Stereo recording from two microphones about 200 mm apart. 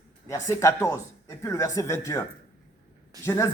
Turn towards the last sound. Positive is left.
turn(degrees=15)  # may be behind; listen again after turning